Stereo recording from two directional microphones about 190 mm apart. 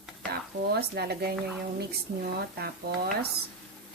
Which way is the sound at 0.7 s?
55° right (ahead or behind).